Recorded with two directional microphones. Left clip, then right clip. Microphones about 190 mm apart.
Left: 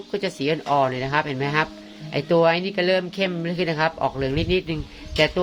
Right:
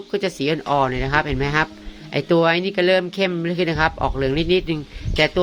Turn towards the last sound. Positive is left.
turn(degrees=-30)  # may be behind; listen again after turning